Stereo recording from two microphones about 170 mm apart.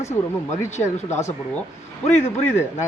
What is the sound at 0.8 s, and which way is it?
Speech, 40° left (ahead or behind).